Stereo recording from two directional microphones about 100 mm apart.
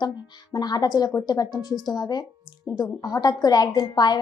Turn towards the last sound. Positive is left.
turn(degrees=45)  # may be behind; listen again after turning